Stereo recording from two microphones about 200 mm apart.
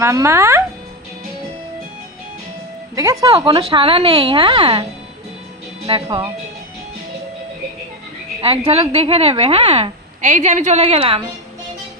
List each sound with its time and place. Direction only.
0.0 s speech: 15° right (ahead or behind)
2.9 s a woman's voice: 15° right (ahead or behind)
8.4 s a woman's voice: 30° right (ahead or behind)